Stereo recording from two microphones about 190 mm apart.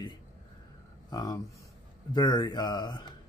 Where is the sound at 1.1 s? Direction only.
20° left (ahead or behind).